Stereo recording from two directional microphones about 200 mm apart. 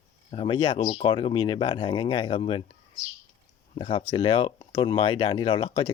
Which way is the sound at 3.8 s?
25° left (ahead or behind).